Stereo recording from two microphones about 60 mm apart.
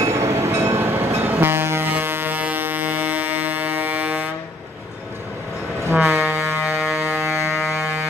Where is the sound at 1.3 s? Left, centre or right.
Right.